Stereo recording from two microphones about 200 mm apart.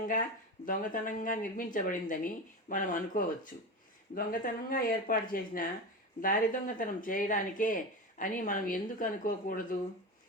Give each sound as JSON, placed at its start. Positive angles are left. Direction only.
{"t": 0.6, "sound": "speech", "side_deg": 40}